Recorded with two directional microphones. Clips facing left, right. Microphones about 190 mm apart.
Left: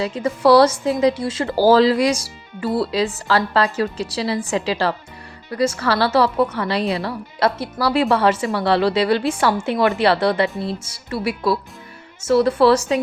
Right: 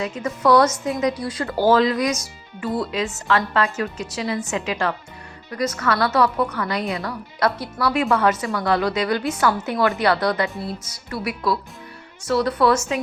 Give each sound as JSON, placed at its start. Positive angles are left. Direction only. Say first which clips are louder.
{"t": 0.0, "sound": "a woman's voice", "louder": "left 4 dB", "side_deg": 30}